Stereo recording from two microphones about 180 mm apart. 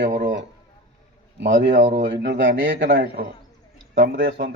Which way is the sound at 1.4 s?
80° right.